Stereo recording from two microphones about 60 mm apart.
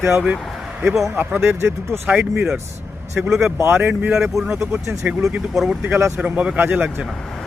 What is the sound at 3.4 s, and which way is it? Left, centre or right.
Speech, right.